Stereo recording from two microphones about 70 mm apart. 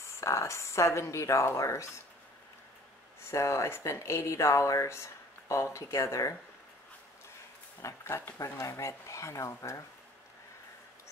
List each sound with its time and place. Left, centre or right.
0.0 s speech: left
3.3 s speech: left
7.8 s speech: left